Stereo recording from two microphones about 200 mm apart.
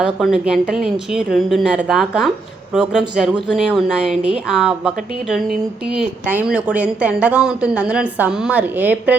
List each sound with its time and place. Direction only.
0.0 s a woman's voice: 5° right (ahead or behind)
3.5 s a woman's voice: centre (ahead or behind)